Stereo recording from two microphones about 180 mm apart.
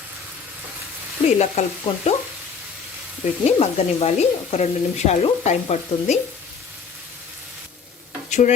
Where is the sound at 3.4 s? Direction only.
35° left (ahead or behind).